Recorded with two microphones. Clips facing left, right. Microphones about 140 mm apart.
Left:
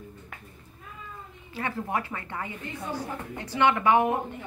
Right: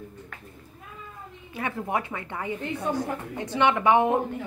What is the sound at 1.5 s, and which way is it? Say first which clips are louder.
A woman's voice: right 2 dB; 15° right (ahead or behind).